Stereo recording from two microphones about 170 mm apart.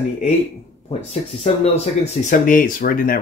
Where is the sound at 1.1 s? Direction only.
40° left (ahead or behind).